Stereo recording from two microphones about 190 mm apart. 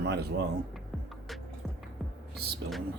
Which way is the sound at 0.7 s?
Centre (ahead or behind).